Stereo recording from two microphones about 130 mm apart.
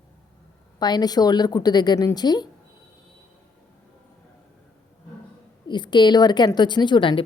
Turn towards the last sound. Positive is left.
turn(degrees=40)  # may be behind; listen again after turning